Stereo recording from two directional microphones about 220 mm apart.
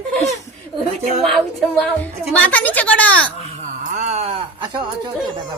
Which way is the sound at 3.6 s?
30° right (ahead or behind).